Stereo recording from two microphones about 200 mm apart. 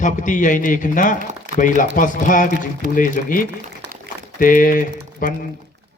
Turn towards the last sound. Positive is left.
turn(degrees=45)  # may be behind; listen again after turning